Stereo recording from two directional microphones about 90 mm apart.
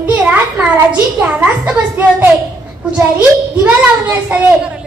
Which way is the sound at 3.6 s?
15° right (ahead or behind).